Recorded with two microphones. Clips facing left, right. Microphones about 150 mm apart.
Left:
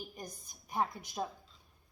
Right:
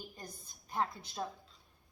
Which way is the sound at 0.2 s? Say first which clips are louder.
Left 3 dB; 15° left (ahead or behind).